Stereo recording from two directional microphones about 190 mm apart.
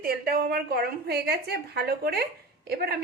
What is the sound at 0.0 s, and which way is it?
A woman's voice, 50° right (ahead or behind).